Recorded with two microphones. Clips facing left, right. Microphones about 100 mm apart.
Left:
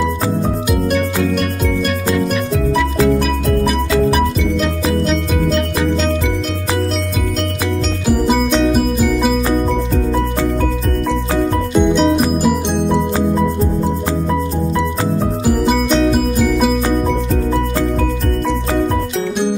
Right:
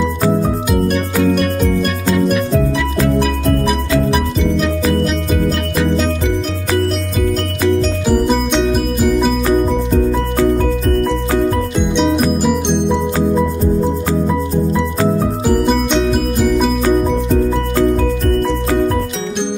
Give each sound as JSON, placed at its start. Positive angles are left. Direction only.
{"t": 2.1, "sound": "music", "side_deg": 0}
{"t": 8.1, "sound": "music", "side_deg": 5}
{"t": 11.7, "sound": "music", "side_deg": 0}
{"t": 15.4, "sound": "music", "side_deg": 0}